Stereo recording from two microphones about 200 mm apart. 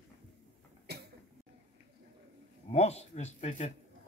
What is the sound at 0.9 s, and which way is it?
Cough, 55° right (ahead or behind).